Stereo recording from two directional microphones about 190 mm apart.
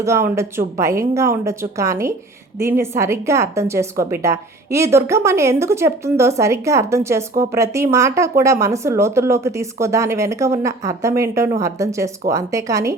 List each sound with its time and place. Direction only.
0.0 s a woman's voice: 15° right (ahead or behind)